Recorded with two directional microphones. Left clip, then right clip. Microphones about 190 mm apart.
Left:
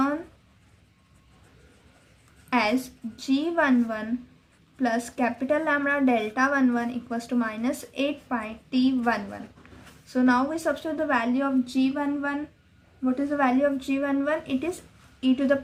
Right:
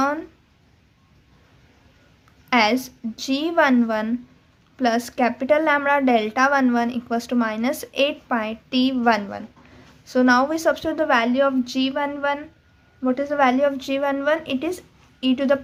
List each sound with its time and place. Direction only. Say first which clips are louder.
2.5 s a woman's voice: right 6 dB; 35° right (ahead or behind)